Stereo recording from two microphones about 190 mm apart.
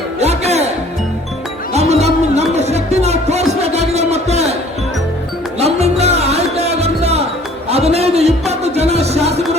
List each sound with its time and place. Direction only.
0.2 s music: 35° right (ahead or behind)
1.7 s music: 35° right (ahead or behind)
5.5 s music: 35° right (ahead or behind)